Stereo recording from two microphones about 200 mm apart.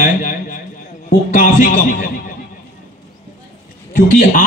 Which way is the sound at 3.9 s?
45° left (ahead or behind).